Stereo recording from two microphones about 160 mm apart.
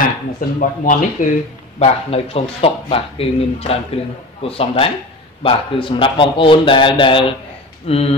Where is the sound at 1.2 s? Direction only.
55° left (ahead or behind).